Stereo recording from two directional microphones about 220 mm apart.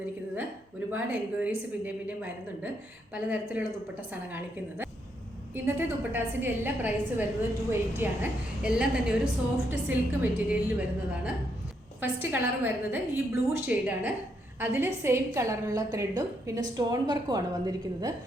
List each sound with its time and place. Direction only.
0.9 s a woman's voice: 5° right (ahead or behind)